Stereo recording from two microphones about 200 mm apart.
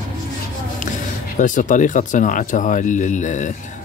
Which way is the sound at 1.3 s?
40° left (ahead or behind).